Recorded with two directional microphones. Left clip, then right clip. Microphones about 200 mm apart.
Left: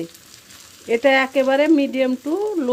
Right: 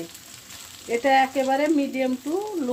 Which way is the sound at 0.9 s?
45° left (ahead or behind).